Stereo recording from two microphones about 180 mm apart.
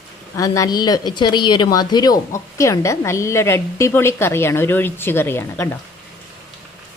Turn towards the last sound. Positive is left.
turn(degrees=15)  # may be behind; listen again after turning